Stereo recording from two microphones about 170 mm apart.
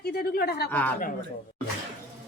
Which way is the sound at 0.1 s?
65° left (ahead or behind).